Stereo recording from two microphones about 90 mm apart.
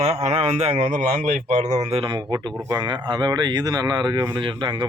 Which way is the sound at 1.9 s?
70° right (ahead or behind).